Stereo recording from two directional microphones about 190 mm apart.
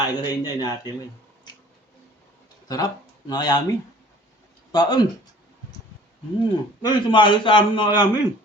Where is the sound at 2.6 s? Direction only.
20° left (ahead or behind).